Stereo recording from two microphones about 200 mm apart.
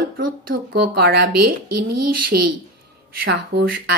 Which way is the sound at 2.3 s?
50° right (ahead or behind).